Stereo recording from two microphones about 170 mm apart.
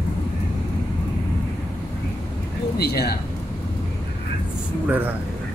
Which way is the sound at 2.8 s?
65° left (ahead or behind).